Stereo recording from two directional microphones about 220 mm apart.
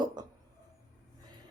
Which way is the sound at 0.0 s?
20° right (ahead or behind).